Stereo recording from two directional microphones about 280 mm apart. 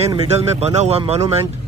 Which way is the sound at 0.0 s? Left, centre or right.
Centre.